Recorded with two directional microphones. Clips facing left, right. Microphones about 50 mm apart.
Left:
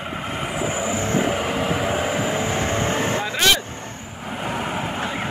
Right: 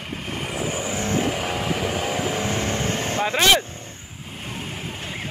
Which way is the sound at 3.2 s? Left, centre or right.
Right.